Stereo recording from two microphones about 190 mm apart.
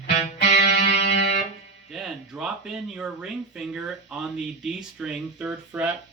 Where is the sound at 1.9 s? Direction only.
5° right (ahead or behind).